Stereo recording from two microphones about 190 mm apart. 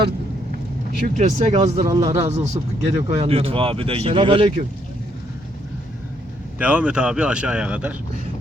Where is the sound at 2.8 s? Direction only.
30° right (ahead or behind).